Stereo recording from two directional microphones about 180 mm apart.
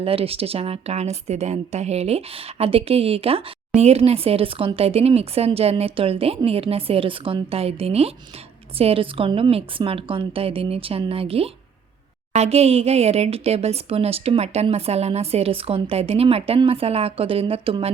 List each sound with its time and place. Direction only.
0.0 s speech: 30° right (ahead or behind)